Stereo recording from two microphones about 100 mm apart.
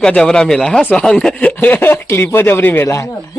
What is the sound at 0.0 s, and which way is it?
Speech, 10° left (ahead or behind).